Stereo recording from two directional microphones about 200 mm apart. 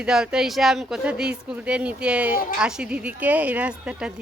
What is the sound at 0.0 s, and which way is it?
Speech, 5° right (ahead or behind).